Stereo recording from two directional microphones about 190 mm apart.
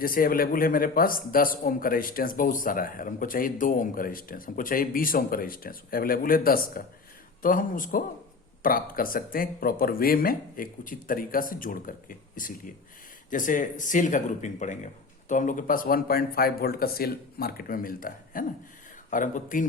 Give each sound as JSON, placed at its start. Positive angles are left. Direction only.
{"t": 0.0, "sound": "a man's voice", "side_deg": 50}